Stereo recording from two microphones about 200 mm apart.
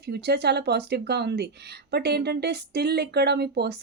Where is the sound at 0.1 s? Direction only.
55° right (ahead or behind).